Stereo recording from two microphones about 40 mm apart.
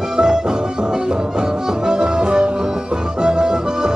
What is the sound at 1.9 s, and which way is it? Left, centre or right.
Music, centre.